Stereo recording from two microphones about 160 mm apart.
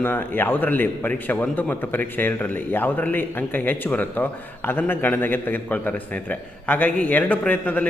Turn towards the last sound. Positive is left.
turn(degrees=10)  # may be behind; listen again after turning